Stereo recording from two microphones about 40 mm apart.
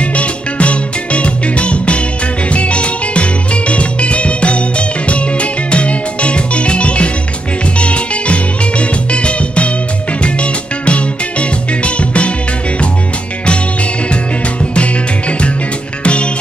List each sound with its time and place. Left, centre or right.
0.0 s music: left
14.6 s music: left